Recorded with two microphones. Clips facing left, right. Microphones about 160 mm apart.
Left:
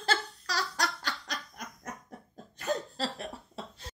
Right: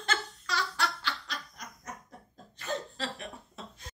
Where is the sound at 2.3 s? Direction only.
40° left (ahead or behind).